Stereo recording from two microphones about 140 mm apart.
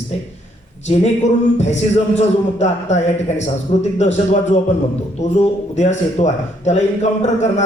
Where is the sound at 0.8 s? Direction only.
55° left (ahead or behind).